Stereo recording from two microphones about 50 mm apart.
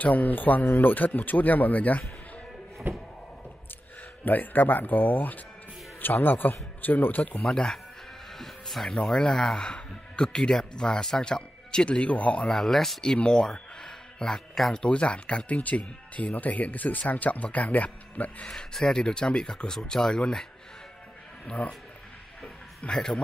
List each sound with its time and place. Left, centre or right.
0.0 s speech: left
2.9 s a sound: right
4.2 s a man's voice: left
7.4 s speech: centre; by 12.4 s left
12.4 s speech: centre; by 18.5 s left
18.5 s speech: centre
21.5 s speech: centre
22.4 s a sound: centre